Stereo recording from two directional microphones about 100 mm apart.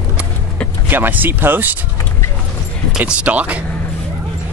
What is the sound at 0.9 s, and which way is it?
Speech, 20° right (ahead or behind).